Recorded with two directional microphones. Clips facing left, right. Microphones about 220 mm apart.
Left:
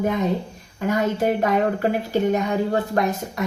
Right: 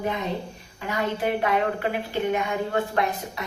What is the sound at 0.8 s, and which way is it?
A woman's voice, 45° left (ahead or behind).